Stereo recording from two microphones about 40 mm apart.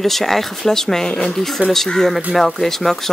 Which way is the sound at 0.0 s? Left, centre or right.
Centre.